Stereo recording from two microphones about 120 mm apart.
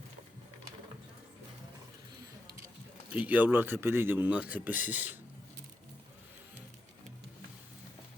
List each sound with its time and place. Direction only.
3.1 s speech: 10° right (ahead or behind)